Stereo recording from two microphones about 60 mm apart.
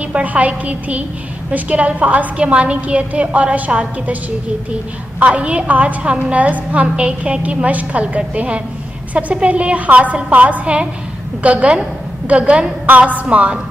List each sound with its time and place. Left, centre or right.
0.1 s a woman's voice: right
5.2 s a woman's voice: right